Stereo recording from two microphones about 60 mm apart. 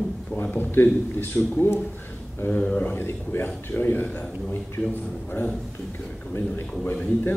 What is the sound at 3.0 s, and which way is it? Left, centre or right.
A man's voice, left.